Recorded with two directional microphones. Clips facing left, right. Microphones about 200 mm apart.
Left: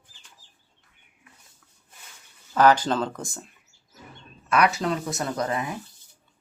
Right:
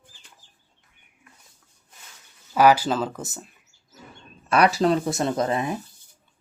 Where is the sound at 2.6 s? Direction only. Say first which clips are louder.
Right 1 dB; 10° right (ahead or behind).